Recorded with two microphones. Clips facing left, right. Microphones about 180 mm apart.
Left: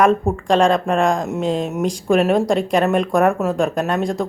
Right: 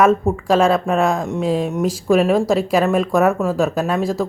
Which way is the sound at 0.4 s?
5° right (ahead or behind).